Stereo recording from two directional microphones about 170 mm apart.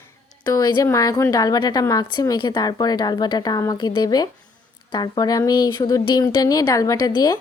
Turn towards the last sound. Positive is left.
turn(degrees=20)  # may be behind; listen again after turning